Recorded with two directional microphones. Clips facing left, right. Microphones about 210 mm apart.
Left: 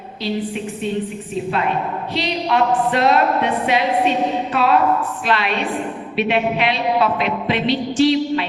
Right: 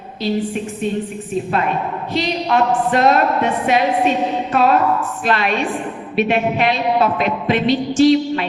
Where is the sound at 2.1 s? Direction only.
45° right (ahead or behind).